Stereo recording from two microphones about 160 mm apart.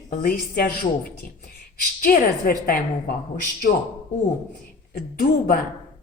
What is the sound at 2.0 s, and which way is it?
Speech, 65° left (ahead or behind).